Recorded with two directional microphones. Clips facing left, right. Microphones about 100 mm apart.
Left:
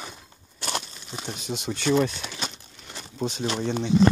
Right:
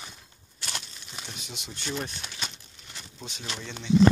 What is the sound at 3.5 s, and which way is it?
Speech, 40° left (ahead or behind).